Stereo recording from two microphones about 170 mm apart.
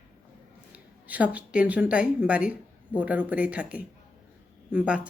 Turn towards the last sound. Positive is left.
turn(degrees=-5)  # may be behind; listen again after turning